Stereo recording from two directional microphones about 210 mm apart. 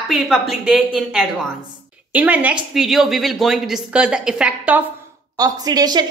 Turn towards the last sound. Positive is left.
turn(degrees=-20)  # may be behind; listen again after turning